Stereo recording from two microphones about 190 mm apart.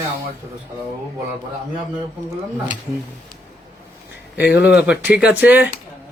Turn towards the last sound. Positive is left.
turn(degrees=-10)  # may be behind; listen again after turning